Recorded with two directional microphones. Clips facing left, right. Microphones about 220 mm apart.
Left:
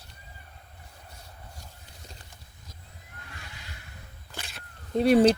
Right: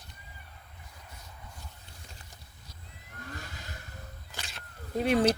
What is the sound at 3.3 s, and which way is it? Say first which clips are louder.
Vehicle: right 5 dB; 45° right (ahead or behind).